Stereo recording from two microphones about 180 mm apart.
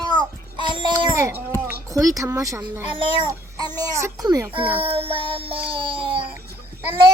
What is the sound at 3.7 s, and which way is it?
A child's voice, 20° right (ahead or behind).